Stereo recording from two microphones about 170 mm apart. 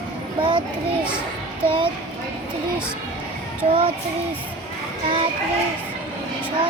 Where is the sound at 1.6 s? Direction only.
30° right (ahead or behind).